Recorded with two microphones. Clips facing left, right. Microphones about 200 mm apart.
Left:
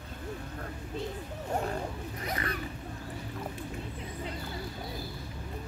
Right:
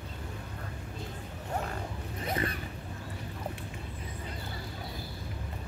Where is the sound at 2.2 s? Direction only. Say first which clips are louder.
Right 3 dB; 25° right (ahead or behind).